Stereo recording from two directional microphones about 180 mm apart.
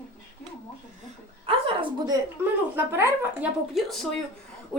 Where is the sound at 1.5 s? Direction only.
30° right (ahead or behind).